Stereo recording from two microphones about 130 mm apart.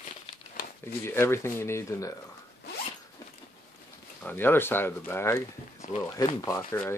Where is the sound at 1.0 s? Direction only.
20° left (ahead or behind).